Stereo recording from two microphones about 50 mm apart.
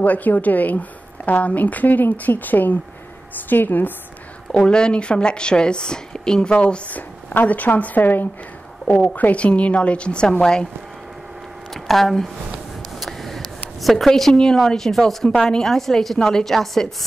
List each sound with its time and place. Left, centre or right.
0.0 s speech: left
4.6 s a woman's voice: centre; by 8.3 s left
8.9 s a woman's voice: left
11.7 s speech: centre
13.0 s a sound: centre
13.8 s a woman's voice: centre